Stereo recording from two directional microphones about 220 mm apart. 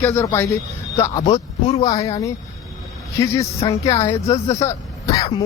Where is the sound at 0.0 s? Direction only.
10° left (ahead or behind).